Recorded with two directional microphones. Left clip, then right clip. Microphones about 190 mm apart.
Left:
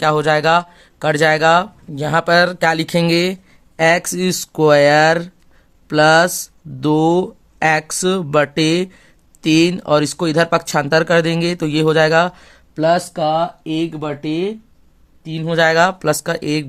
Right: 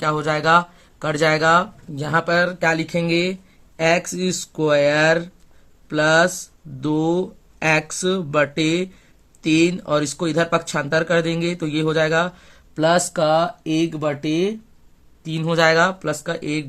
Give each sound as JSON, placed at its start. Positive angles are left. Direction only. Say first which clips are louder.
{"t": 0.0, "sound": "speech", "louder": "left 6 dB", "side_deg": 35}
{"t": 12.7, "sound": "speech", "louder": "left 2 dB", "side_deg": 10}
{"t": 15.6, "sound": "speech", "louder": "left 3 dB", "side_deg": 35}